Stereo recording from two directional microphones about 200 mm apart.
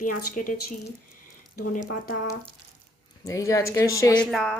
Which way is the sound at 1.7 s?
40° left (ahead or behind).